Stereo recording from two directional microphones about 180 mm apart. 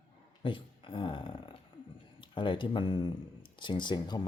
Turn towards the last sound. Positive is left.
turn(degrees=25)  # may be behind; listen again after turning